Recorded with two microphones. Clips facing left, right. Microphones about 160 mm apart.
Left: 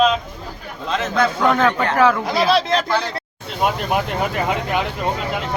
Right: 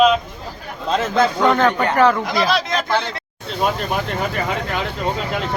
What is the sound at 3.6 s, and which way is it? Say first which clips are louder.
Speech: left 1 dB; 15° left (ahead or behind).